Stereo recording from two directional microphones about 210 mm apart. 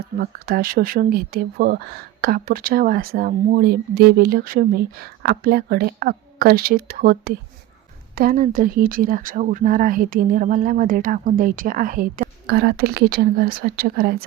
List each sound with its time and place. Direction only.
0.2 s speech: 45° right (ahead or behind)